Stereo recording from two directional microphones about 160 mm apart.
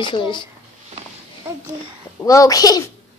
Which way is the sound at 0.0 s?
30° left (ahead or behind).